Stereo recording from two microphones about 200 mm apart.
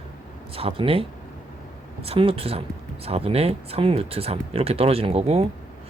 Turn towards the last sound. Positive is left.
turn(degrees=-30)  # may be behind; listen again after turning